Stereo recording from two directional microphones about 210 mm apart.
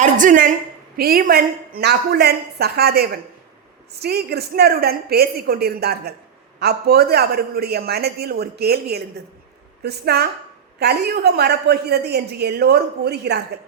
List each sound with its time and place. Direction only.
0.0 s a woman's voice: 40° right (ahead or behind)